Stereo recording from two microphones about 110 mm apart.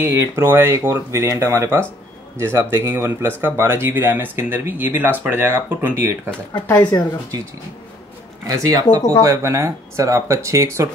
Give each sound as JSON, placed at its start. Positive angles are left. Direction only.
{"t": 0.0, "sound": "speech", "side_deg": -20}
{"t": 6.8, "sound": "speech", "side_deg": 40}
{"t": 8.5, "sound": "speech", "side_deg": -30}